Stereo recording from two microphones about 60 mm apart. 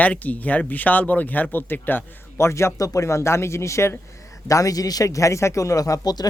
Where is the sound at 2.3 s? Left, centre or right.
Left.